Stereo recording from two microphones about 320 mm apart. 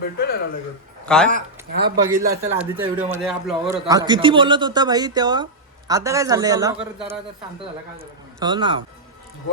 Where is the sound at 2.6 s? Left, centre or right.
Centre.